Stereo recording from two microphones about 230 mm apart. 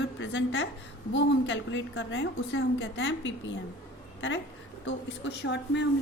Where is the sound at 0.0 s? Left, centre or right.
Left.